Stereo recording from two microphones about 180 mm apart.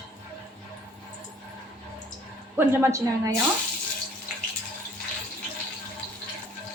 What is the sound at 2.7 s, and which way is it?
Speech, 15° right (ahead or behind).